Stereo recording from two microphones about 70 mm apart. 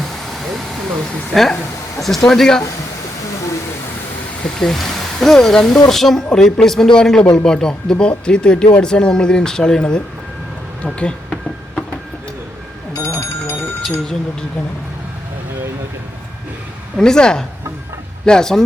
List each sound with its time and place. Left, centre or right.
1.3 s speech: centre
4.4 s speech: centre
12.9 s telephone bell ringing: left
17.0 s speech: centre